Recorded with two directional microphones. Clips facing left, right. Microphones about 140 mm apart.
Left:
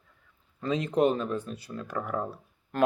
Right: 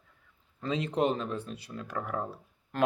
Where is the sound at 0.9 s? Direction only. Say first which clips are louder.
Left 5 dB; 30° right (ahead or behind).